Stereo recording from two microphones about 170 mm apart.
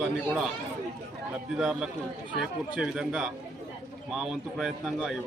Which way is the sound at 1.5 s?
5° right (ahead or behind).